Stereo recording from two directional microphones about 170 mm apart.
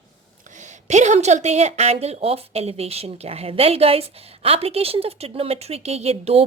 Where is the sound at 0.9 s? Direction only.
45° right (ahead or behind).